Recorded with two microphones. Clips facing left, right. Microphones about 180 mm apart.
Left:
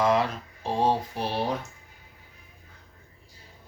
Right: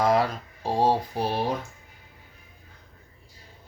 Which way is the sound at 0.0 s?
40° right (ahead or behind).